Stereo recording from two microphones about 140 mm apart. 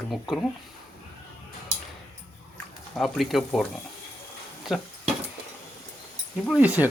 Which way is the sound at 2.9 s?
Centre (ahead or behind).